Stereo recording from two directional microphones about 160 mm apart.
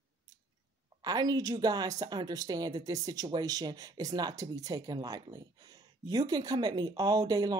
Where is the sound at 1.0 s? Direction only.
25° right (ahead or behind).